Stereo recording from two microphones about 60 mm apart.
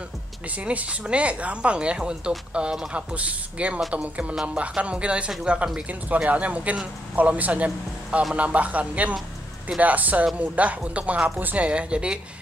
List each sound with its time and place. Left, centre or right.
0.5 s speech: right